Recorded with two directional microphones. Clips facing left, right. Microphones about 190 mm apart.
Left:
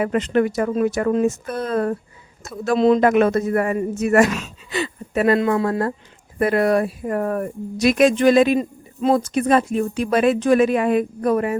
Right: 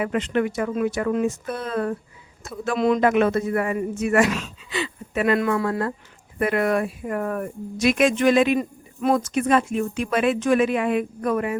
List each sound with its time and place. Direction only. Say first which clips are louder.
0.0 s speech: left 4 dB; 40° left (ahead or behind)
2.7 s speech: left 5 dB; 30° left (ahead or behind)
3.0 s speech: left 3 dB; 45° left (ahead or behind)
5.4 s speech: left 3 dB; 25° left (ahead or behind)
6.4 s speech: left 4 dB; 35° left (ahead or behind)
8.5 s speech: left 3 dB; 25° left (ahead or behind)